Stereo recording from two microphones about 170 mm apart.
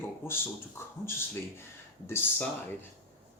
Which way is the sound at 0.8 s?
15° left (ahead or behind).